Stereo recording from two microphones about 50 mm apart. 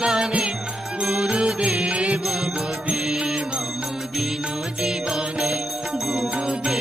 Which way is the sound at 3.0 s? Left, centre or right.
Centre.